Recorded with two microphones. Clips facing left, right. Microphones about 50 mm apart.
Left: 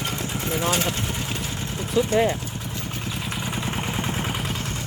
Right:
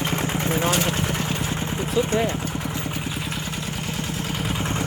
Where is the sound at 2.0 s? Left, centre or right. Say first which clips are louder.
Left 1 dB; centre.